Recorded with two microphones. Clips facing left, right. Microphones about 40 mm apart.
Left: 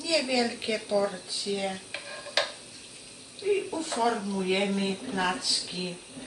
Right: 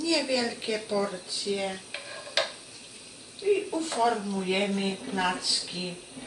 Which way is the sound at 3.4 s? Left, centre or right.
Centre.